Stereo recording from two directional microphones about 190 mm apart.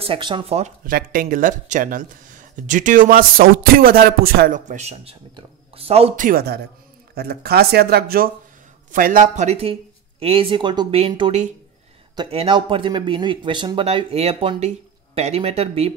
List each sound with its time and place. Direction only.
0.0 s speech: 25° right (ahead or behind)
6.2 s speech: 55° right (ahead or behind); by 15.9 s 35° right (ahead or behind)